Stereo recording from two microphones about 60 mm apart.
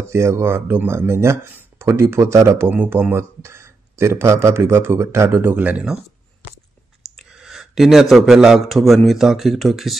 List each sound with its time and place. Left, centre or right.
0.0 s speech: right
2.7 s speech: right
3.2 s speech: right
5.4 s speech: right
7.3 s speech: centre